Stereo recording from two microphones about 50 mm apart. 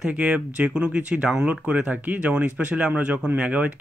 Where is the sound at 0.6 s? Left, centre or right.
Right.